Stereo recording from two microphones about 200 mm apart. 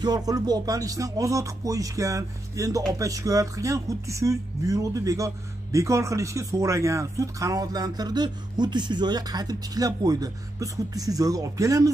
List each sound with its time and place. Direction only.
0.0 s speech: 20° right (ahead or behind)